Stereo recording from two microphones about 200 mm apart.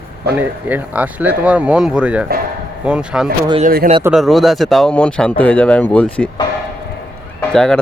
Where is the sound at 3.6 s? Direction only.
50° right (ahead or behind).